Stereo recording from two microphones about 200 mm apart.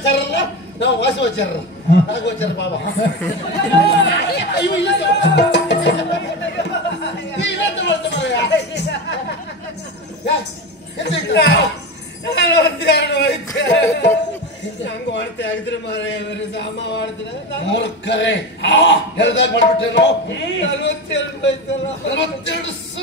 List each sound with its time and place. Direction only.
0.0 s a man's voice: 60° left (ahead or behind)
7.3 s music: 60° left (ahead or behind)
11.0 s a man's voice: 60° left (ahead or behind)